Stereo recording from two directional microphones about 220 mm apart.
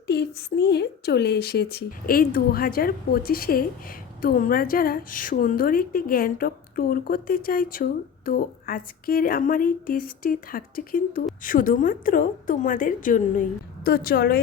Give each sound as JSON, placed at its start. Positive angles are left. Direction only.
{"t": 0.1, "sound": "a woman's voice", "side_deg": 50}